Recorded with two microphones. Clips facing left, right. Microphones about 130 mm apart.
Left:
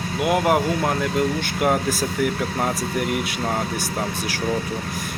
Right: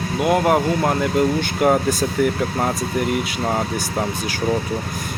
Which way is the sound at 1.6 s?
Centre (ahead or behind).